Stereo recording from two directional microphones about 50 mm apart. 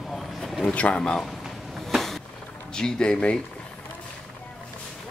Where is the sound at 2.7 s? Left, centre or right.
Centre.